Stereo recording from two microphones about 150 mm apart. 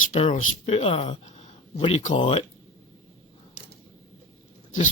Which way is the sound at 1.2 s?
50° left (ahead or behind).